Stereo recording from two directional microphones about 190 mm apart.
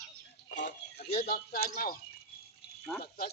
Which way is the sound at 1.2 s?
55° left (ahead or behind).